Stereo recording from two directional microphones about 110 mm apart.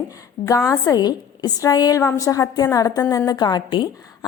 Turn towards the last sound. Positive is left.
turn(degrees=40)  # may be behind; listen again after turning